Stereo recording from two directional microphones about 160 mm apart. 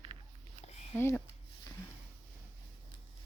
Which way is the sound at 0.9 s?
15° left (ahead or behind).